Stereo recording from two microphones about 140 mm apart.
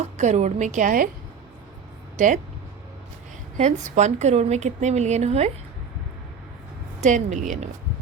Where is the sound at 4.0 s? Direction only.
55° right (ahead or behind).